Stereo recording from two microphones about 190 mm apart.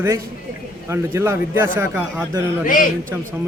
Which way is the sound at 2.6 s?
45° left (ahead or behind).